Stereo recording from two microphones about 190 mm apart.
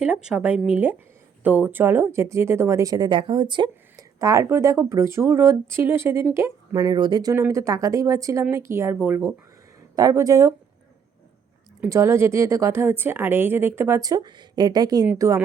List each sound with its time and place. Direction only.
0.0 s speech: 5° right (ahead or behind)
11.8 s speech: 15° right (ahead or behind)